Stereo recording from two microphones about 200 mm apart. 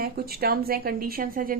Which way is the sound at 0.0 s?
50° right (ahead or behind).